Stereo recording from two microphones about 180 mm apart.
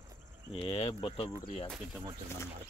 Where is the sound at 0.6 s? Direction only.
30° left (ahead or behind).